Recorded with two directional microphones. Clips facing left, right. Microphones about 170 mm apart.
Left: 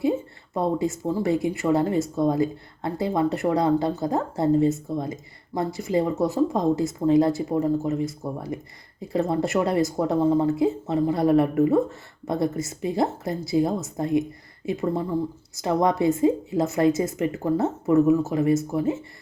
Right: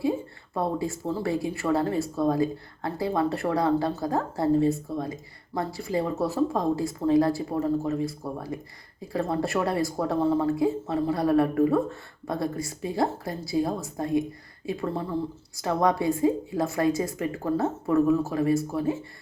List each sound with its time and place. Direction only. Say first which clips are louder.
0.5 s speech: left 4 dB; 20° left (ahead or behind)